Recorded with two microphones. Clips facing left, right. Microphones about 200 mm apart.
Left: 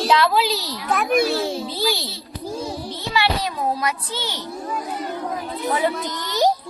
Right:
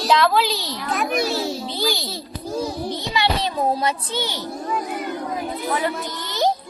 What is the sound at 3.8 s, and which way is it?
Speech, 25° right (ahead or behind).